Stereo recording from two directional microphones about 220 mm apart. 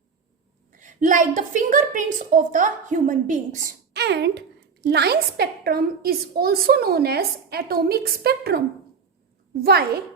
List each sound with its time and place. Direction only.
0.8 s a woman's voice: 35° right (ahead or behind)
3.9 s a woman's voice: 50° right (ahead or behind)